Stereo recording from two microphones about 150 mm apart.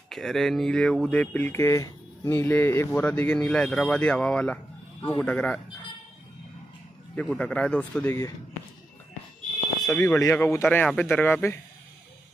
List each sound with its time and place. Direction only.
0.1 s speech: centre (ahead or behind)
7.2 s speech: 5° left (ahead or behind)
9.8 s speech: 20° left (ahead or behind)